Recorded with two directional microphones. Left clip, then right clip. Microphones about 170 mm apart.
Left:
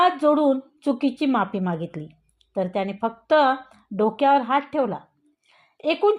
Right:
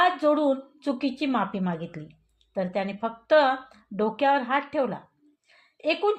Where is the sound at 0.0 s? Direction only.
40° left (ahead or behind).